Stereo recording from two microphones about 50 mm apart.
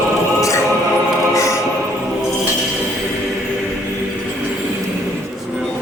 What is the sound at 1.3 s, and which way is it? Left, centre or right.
Choir, left.